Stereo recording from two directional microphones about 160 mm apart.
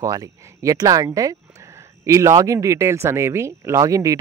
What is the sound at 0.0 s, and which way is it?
Speech, 20° right (ahead or behind).